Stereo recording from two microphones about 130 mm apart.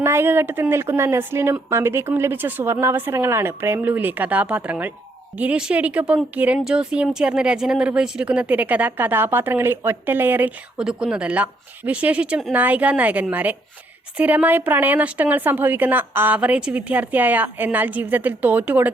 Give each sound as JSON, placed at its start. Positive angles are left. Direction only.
{"t": 0.0, "sound": "speech", "side_deg": -20}